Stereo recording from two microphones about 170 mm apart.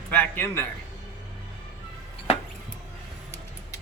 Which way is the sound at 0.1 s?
10° left (ahead or behind).